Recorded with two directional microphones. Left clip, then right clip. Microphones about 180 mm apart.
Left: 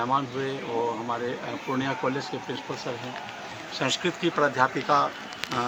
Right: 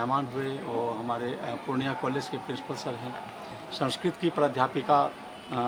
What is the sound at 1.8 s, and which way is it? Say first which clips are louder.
Speech: left 3 dB; 30° right (ahead or behind).